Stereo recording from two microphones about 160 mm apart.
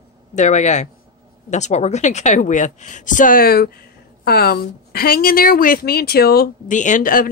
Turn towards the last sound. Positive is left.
turn(degrees=60)  # may be behind; listen again after turning